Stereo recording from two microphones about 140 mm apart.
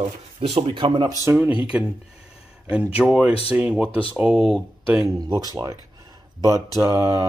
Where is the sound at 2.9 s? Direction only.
5° right (ahead or behind).